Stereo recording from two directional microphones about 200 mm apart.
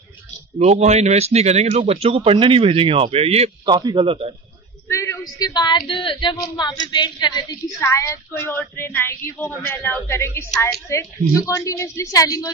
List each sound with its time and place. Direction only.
0.6 s speech: 35° right (ahead or behind)
4.8 s a woman's voice: 15° left (ahead or behind)